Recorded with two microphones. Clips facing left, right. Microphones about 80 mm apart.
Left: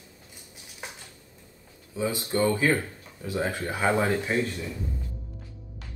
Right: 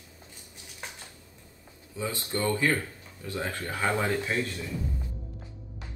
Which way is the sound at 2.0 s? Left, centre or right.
Centre.